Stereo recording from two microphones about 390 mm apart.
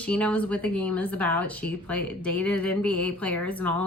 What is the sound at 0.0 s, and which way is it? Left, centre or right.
Speech, centre.